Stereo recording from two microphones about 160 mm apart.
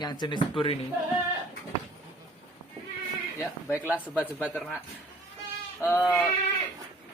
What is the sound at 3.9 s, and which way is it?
Speech, 10° right (ahead or behind).